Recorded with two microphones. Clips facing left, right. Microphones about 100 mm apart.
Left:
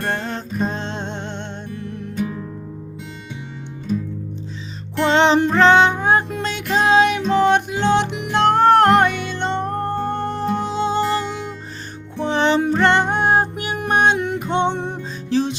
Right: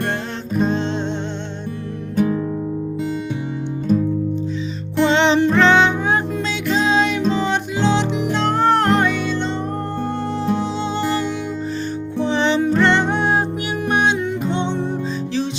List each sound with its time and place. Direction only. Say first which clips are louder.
0.6 s music: right 5 dB; 45° left (ahead or behind)
4.9 s music: even; 45° left (ahead or behind)
6.3 s music: right 1 dB; 55° left (ahead or behind)
12.2 s music: left 1 dB; 50° left (ahead or behind)
15.3 s music: left 6 dB; 45° left (ahead or behind)